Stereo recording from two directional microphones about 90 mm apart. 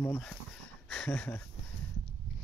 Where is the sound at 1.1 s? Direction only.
20° left (ahead or behind).